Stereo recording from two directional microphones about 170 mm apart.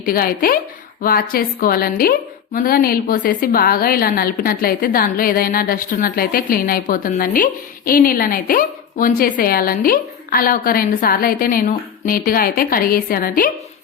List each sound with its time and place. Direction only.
0.0 s a woman's voice: 60° left (ahead or behind)